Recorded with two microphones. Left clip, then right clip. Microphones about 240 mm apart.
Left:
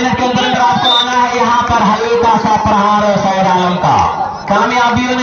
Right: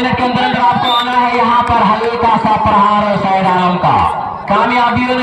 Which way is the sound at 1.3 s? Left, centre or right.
Right.